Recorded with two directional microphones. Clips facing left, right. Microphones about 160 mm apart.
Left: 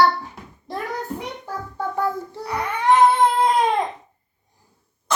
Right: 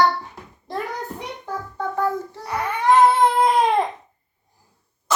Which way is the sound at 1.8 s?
10° left (ahead or behind).